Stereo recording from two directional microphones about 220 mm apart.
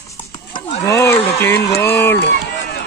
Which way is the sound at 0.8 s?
10° left (ahead or behind).